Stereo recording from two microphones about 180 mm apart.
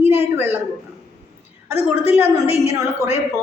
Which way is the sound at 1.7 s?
35° left (ahead or behind).